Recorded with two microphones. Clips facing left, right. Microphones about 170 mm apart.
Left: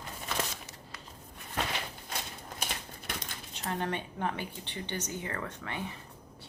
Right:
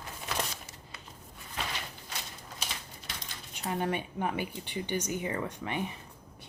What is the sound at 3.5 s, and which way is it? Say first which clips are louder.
Speech: right 2 dB; 10° right (ahead or behind).